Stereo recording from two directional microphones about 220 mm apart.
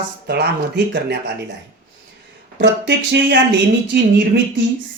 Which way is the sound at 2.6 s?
50° right (ahead or behind).